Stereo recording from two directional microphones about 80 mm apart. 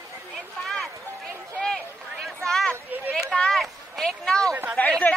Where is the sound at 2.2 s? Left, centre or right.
Centre.